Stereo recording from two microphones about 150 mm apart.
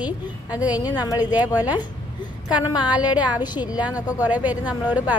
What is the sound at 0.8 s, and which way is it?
Speech, 25° left (ahead or behind).